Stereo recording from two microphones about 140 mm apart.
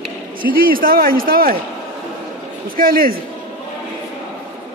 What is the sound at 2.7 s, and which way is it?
Speech, 90° right.